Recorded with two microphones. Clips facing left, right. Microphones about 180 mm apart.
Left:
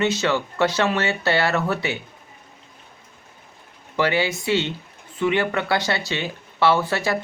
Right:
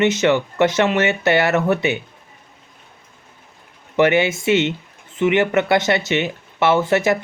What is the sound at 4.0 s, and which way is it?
Speech, 20° right (ahead or behind).